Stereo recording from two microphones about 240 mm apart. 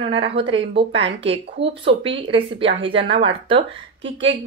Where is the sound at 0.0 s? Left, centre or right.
Right.